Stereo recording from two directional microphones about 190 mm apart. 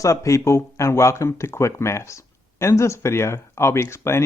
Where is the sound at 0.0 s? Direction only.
15° left (ahead or behind).